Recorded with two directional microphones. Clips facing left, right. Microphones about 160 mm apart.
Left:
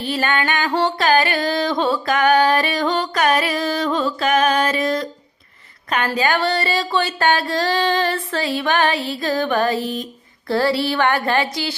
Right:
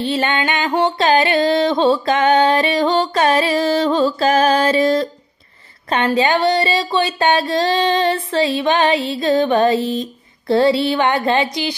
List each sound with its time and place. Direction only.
0.0 s music: 25° right (ahead or behind)